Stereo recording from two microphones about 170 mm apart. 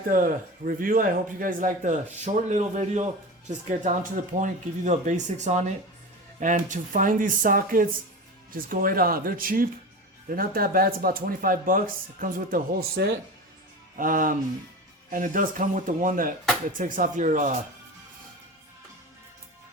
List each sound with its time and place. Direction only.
0.1 s speech: 55° right (ahead or behind)